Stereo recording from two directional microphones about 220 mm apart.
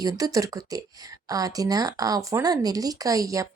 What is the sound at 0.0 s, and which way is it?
Speech, 15° right (ahead or behind).